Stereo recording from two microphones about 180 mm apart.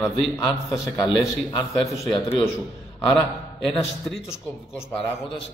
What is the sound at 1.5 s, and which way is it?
Speech, 25° left (ahead or behind).